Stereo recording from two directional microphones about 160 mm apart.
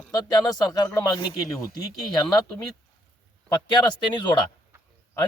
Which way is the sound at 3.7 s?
30° left (ahead or behind).